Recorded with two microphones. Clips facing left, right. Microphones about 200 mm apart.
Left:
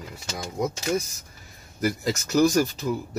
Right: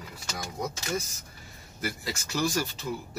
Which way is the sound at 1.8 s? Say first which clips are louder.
Left 9 dB; 45° left (ahead or behind).